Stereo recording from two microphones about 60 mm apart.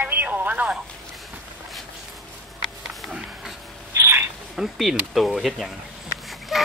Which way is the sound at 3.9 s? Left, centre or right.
Right.